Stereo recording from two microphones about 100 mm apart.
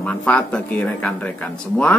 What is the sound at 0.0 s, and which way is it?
Speech, 10° left (ahead or behind).